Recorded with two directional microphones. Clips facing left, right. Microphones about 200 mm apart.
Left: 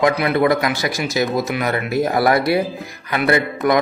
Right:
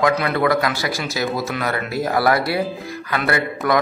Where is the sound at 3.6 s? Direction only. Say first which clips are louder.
Left 2 dB; 20° left (ahead or behind).